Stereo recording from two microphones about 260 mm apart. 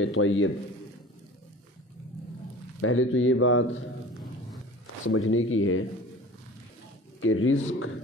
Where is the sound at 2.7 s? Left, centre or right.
Left.